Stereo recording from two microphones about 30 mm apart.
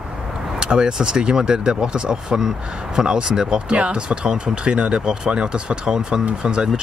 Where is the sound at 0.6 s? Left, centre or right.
Right.